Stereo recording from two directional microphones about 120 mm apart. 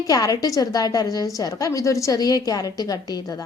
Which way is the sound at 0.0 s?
30° left (ahead or behind).